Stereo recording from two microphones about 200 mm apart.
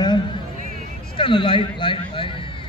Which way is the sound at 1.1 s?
25° left (ahead or behind).